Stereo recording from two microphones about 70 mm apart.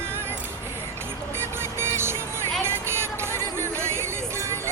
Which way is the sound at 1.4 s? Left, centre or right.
Right.